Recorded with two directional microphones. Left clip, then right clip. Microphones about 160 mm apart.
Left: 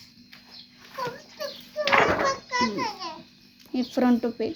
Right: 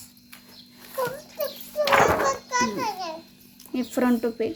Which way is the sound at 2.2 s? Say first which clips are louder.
Right 1 dB; 90° right.